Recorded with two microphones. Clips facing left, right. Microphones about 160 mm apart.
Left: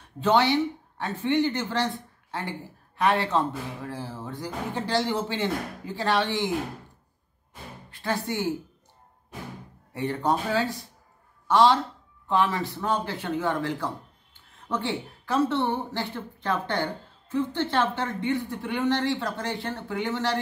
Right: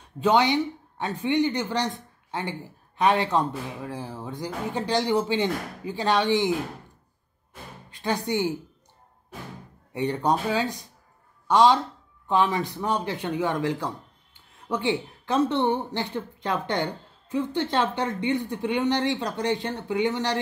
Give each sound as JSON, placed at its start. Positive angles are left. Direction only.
{"t": 0.2, "sound": "speech", "side_deg": -15}
{"t": 3.0, "sound": "speech", "side_deg": -15}
{"t": 7.9, "sound": "a woman's voice", "side_deg": -20}
{"t": 9.9, "sound": "speech", "side_deg": -20}